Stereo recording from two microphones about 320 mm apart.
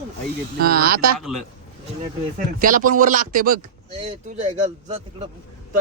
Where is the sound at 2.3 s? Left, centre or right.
Right.